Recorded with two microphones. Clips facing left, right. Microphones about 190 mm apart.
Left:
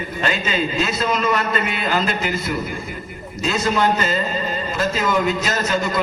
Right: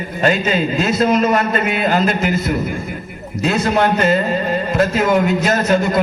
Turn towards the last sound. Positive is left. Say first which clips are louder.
# right 6 dB
turn(degrees=-55)  # may be behind; listen again after turning